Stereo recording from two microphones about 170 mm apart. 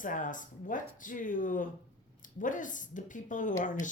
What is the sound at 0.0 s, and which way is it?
Speech, 50° left (ahead or behind).